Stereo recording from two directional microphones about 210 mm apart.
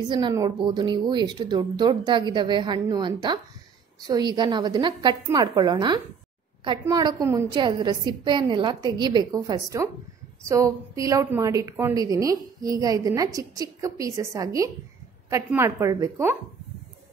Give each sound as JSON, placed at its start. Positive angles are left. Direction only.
{"t": 0.1, "sound": "a woman's voice", "side_deg": -20}